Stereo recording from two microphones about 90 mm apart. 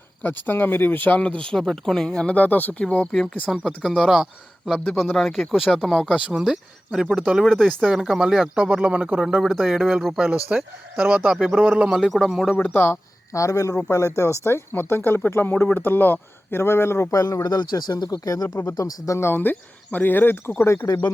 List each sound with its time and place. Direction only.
0.2 s speech: 20° left (ahead or behind); by 6.1 s 5° left (ahead or behind)
6.1 s speech: 10° right (ahead or behind)
7.2 s speech: 15° right (ahead or behind)
7.4 s speech: 5° left (ahead or behind); by 9.2 s 15° right (ahead or behind)
9.4 s speech: centre (ahead or behind)
11.3 s speech: centre (ahead or behind)
12.5 s speech: 20° left (ahead or behind)
17.1 s speech: 40° left (ahead or behind); by 20.8 s 25° left (ahead or behind)